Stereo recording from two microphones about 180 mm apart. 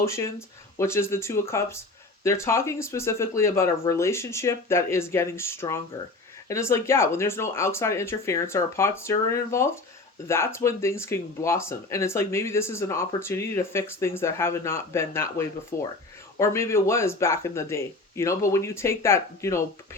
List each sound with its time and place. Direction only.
0.0 s speech: 15° left (ahead or behind)